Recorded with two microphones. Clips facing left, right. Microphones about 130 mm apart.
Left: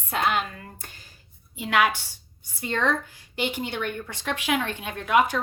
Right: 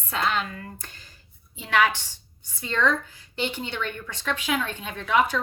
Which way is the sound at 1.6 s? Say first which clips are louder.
Even; 45° left (ahead or behind).